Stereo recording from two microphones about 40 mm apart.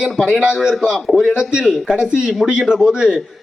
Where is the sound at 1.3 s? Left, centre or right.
Right.